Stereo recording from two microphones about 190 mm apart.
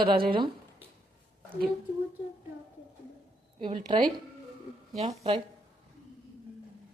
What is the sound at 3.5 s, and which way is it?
A woman's voice, 30° right (ahead or behind).